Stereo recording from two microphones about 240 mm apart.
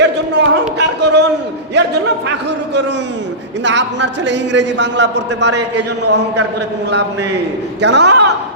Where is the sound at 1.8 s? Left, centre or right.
Right.